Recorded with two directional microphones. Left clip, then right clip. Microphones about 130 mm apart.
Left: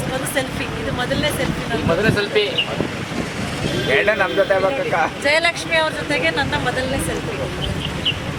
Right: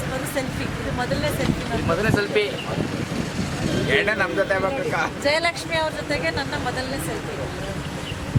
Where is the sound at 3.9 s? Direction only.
30° right (ahead or behind).